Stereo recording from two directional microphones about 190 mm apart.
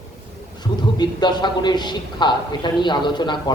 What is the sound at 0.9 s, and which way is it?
A man's voice, 25° left (ahead or behind).